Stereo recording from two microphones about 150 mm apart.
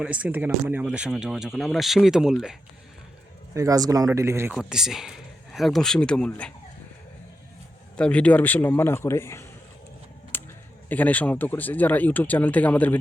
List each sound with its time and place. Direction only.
0.0 s speech: 10° right (ahead or behind)
3.5 s speech: 20° right (ahead or behind)
4.5 s speech: 5° right (ahead or behind)
7.9 s speech: 5° left (ahead or behind)
10.3 s a sound: 15° left (ahead or behind)
10.8 s speech: 10° left (ahead or behind)